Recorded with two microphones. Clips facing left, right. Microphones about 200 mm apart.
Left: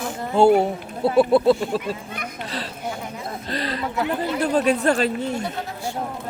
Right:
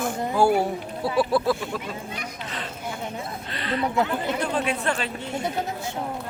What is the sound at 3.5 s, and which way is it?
Speech, 35° left (ahead or behind).